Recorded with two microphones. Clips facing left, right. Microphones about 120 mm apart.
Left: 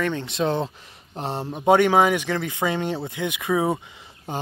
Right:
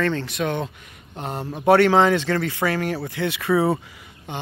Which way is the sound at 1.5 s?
15° left (ahead or behind).